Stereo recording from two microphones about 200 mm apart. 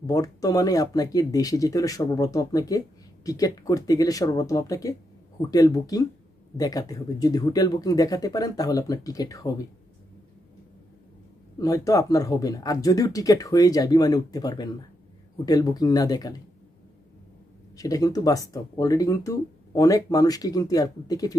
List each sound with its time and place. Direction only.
0.0 s speech: 20° left (ahead or behind)
11.5 s speech: 15° left (ahead or behind)
17.7 s speech: 15° left (ahead or behind)